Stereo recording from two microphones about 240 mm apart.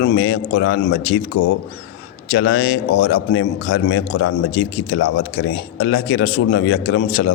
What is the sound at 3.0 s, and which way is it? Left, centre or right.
A man's voice, left.